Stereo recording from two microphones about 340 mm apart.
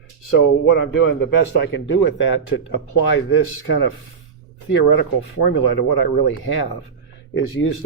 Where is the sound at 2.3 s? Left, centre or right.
Left.